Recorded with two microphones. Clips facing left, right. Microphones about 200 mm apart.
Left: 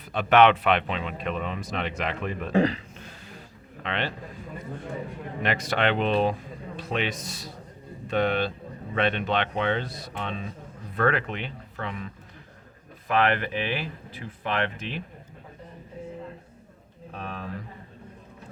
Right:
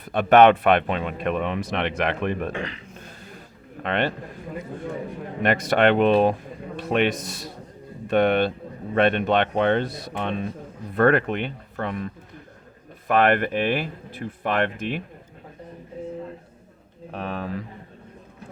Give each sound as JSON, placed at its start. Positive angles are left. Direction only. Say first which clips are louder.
{"t": 0.0, "sound": "speech", "louder": "right 4 dB", "side_deg": -55}
{"t": 2.5, "sound": "speech", "louder": "left 8 dB", "side_deg": 35}
{"t": 3.8, "sound": "speech", "louder": "right 6 dB", "side_deg": -55}
{"t": 5.4, "sound": "speech", "louder": "right 6 dB", "side_deg": -50}
{"t": 17.1, "sound": "speech", "louder": "right 6 dB", "side_deg": -70}